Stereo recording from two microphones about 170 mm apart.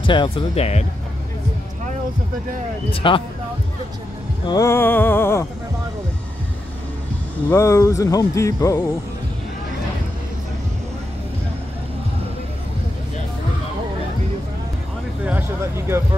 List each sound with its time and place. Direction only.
0.0 s speech: 30° left (ahead or behind)
2.9 s speech: 30° left (ahead or behind)
4.5 s a sound: 15° left (ahead or behind)
7.4 s speech: 15° left (ahead or behind)